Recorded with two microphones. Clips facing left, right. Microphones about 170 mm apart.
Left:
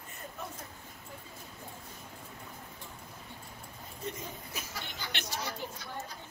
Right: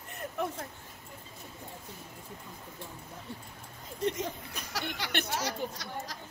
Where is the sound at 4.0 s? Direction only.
90° right.